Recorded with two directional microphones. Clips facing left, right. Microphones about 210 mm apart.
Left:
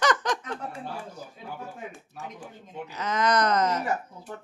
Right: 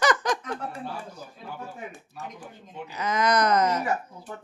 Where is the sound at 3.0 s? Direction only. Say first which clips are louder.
Right 1 dB; 10° right (ahead or behind).